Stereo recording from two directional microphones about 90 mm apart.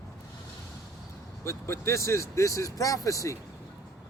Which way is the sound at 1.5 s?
30° left (ahead or behind).